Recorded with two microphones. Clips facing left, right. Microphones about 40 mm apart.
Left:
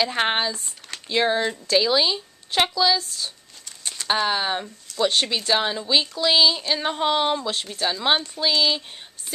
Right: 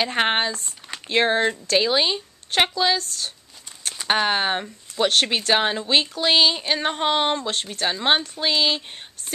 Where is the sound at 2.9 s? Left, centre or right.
Right.